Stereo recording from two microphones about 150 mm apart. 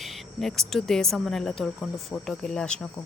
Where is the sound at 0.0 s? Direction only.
Centre (ahead or behind).